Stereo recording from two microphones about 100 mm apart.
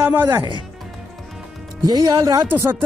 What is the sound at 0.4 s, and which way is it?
Speech, 50° right (ahead or behind).